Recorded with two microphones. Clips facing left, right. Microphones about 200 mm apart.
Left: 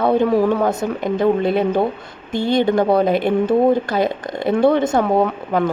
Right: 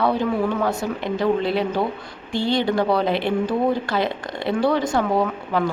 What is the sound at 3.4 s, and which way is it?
A woman's voice, 20° left (ahead or behind).